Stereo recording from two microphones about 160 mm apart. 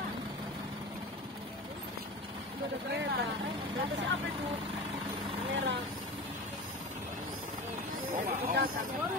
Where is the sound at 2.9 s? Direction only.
90° right.